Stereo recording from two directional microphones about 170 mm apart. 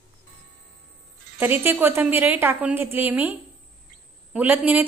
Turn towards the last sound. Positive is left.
turn(degrees=-10)  # may be behind; listen again after turning